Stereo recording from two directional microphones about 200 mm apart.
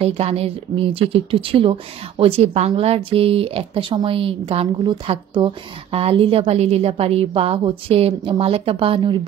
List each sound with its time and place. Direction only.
0.0 s speech: 30° right (ahead or behind)